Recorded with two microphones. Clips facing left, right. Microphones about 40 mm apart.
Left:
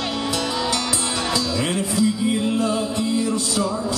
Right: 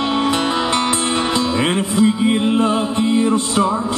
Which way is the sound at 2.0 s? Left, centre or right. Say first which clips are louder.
Right 6 dB; right.